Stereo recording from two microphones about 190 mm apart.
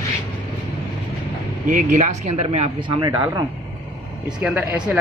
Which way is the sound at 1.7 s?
45° right (ahead or behind).